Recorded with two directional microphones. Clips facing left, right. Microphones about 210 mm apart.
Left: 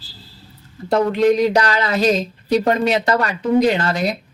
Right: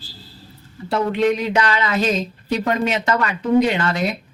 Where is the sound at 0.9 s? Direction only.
40° left (ahead or behind).